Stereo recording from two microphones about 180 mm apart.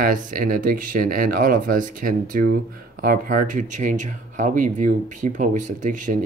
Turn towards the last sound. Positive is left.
turn(degrees=-45)  # may be behind; listen again after turning